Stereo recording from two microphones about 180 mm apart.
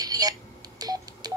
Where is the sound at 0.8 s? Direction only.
20° right (ahead or behind).